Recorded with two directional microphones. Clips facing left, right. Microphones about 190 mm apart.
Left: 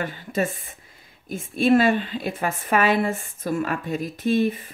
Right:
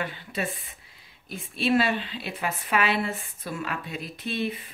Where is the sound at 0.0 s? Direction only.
45° left (ahead or behind).